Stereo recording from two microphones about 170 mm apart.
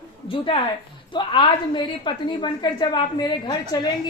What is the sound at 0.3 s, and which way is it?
A woman's voice, 30° left (ahead or behind).